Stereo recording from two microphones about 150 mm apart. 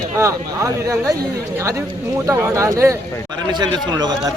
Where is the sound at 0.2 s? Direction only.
20° right (ahead or behind).